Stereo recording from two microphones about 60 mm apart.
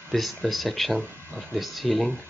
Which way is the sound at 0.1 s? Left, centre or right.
Centre.